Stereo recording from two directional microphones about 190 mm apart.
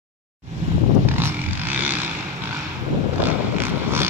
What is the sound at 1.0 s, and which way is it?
Vehicle, 10° right (ahead or behind).